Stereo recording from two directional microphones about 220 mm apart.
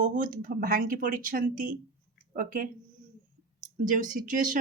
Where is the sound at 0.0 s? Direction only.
40° right (ahead or behind).